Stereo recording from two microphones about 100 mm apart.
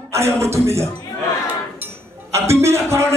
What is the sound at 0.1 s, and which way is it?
Speech, 25° right (ahead or behind).